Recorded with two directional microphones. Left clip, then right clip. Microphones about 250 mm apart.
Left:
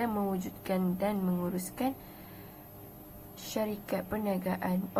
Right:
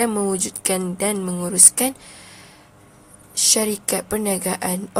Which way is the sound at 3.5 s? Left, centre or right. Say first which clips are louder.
Right 10 dB; right.